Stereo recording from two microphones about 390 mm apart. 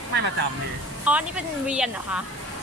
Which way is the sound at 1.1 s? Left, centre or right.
Centre.